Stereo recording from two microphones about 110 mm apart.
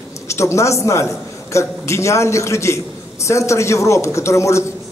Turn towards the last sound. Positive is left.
turn(degrees=25)  # may be behind; listen again after turning